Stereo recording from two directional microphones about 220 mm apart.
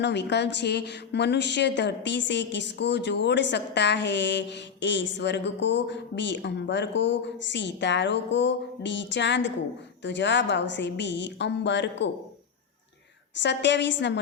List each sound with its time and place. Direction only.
0.0 s a woman's voice: 50° left (ahead or behind)
13.3 s a woman's voice: 55° left (ahead or behind)